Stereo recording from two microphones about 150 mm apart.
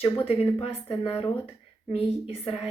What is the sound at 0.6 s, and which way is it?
A woman's voice, 40° left (ahead or behind).